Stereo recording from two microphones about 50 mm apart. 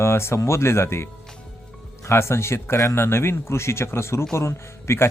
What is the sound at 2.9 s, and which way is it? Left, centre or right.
Speech, left.